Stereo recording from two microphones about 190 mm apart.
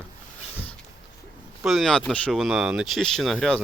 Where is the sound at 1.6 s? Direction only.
Centre (ahead or behind).